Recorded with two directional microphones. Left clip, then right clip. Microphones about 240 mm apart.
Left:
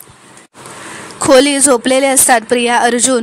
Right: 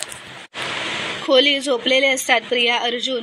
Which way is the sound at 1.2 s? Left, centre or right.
Left.